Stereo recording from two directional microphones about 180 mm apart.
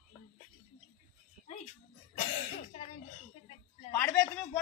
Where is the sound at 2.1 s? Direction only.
40° left (ahead or behind).